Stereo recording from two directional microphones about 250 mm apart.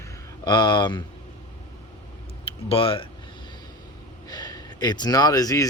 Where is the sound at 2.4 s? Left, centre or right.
Left.